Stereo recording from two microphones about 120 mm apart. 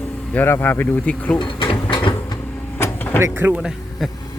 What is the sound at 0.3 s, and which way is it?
Speech, 20° left (ahead or behind).